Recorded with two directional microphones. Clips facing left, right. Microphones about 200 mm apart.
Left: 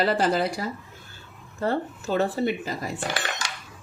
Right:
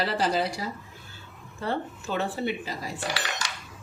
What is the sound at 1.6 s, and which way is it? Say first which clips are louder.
Speech: left 4 dB; 40° left (ahead or behind).